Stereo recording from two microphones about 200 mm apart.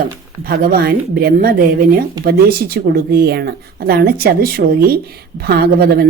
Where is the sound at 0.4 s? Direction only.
50° right (ahead or behind).